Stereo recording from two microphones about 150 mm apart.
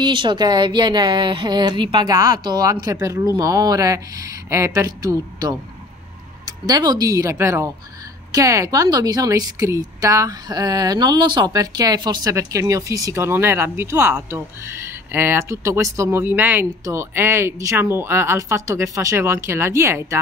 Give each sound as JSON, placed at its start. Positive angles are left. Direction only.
{"t": 0.0, "sound": "a woman's voice", "side_deg": -30}